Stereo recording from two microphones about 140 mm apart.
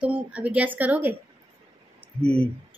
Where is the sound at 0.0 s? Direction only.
10° right (ahead or behind).